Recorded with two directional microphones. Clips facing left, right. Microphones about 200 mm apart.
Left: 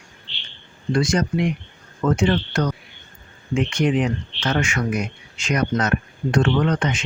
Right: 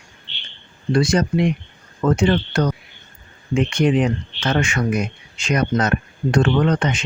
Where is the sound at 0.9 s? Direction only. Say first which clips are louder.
Right 3 dB; 30° right (ahead or behind).